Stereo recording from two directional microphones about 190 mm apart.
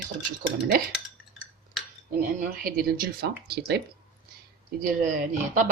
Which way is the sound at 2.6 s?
50° right (ahead or behind).